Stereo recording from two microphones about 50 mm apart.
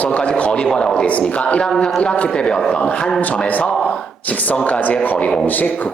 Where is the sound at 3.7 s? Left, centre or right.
Left.